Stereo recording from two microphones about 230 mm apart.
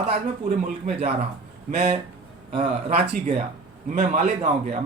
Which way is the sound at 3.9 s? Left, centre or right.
Right.